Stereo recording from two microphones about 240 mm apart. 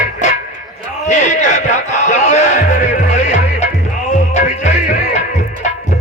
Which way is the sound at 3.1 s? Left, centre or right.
Left.